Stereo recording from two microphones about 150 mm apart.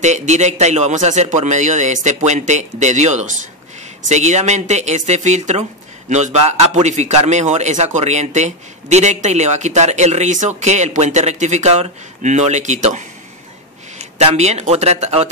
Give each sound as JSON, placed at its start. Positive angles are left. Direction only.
{"t": 0.0, "sound": "speech", "side_deg": -50}